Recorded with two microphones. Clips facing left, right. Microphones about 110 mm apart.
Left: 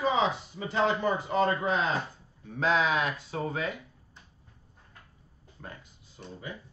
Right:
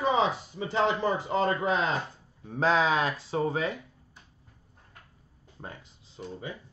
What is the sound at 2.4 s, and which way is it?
A man's voice, 35° right (ahead or behind).